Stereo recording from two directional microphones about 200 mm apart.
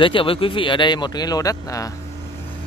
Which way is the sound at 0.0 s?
25° left (ahead or behind).